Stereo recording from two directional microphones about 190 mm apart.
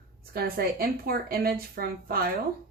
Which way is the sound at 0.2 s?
55° right (ahead or behind).